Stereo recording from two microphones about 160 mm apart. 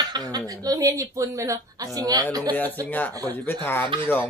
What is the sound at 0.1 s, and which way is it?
Speech, 25° right (ahead or behind).